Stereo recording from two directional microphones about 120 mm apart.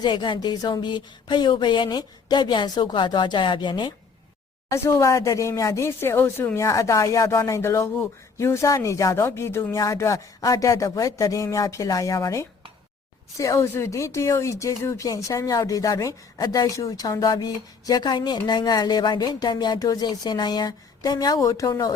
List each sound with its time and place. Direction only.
0.0 s a woman's voice: 40° left (ahead or behind)
4.7 s a woman's voice: 20° left (ahead or behind)